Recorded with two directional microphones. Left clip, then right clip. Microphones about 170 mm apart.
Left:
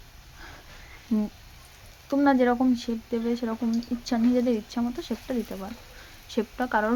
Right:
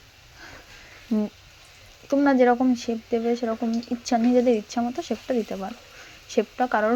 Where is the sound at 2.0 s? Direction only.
5° left (ahead or behind).